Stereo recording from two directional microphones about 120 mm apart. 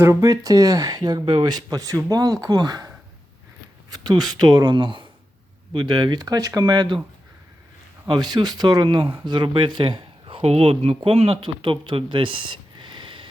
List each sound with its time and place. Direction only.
0.0 s speech: 25° right (ahead or behind)
8.0 s speech: 35° right (ahead or behind)
10.3 s speech: 55° right (ahead or behind)